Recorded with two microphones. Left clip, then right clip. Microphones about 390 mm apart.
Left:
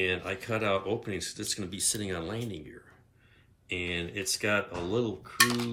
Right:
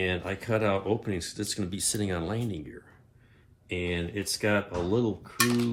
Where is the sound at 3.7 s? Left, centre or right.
Centre.